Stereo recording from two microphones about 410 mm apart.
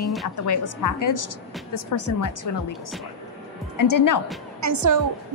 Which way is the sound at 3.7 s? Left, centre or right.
Left.